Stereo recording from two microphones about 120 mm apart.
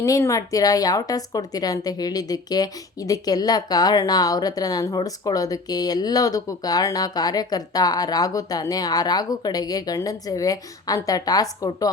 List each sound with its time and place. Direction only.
0.0 s a woman's voice: 25° left (ahead or behind)